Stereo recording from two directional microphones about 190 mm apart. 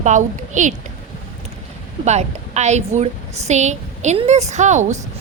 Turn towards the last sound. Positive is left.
turn(degrees=-40)  # may be behind; listen again after turning